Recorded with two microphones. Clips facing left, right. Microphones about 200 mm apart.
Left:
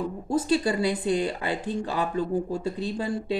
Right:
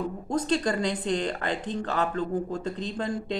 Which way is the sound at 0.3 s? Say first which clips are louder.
Left 2 dB; 10° left (ahead or behind).